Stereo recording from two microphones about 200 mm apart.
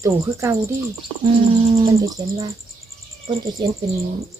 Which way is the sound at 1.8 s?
15° right (ahead or behind).